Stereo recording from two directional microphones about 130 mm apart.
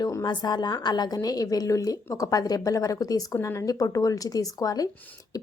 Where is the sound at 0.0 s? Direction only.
30° left (ahead or behind).